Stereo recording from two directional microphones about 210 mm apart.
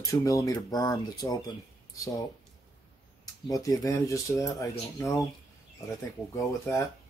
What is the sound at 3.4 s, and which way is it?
Speech, 15° left (ahead or behind).